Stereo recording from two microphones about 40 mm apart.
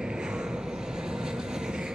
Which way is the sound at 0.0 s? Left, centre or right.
Centre.